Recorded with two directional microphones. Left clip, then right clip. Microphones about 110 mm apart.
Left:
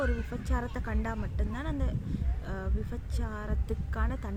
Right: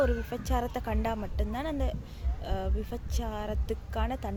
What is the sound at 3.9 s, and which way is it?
Speech, 35° left (ahead or behind).